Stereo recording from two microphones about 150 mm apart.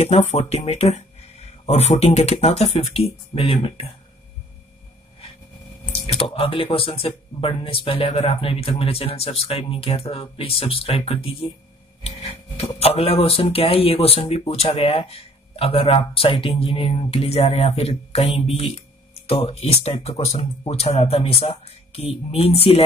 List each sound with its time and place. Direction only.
0.0 s speech: 45° left (ahead or behind)
5.9 s speech: 40° left (ahead or behind)
12.7 s speech: 40° left (ahead or behind)